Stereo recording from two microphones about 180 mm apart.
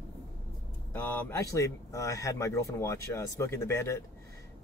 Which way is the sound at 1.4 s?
15° left (ahead or behind).